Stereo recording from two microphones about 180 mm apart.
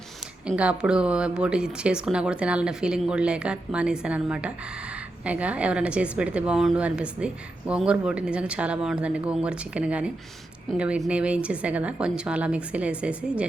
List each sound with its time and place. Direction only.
0.4 s a woman's voice: 5° right (ahead or behind)